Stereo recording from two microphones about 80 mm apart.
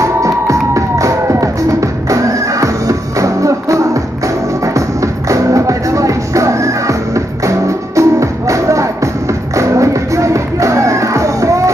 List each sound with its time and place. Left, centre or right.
0.0 s music: right